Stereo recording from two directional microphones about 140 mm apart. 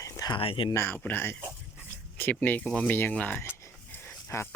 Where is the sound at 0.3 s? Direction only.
40° left (ahead or behind).